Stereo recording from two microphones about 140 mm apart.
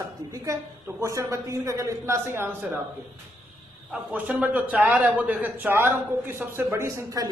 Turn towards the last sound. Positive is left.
turn(degrees=-25)  # may be behind; listen again after turning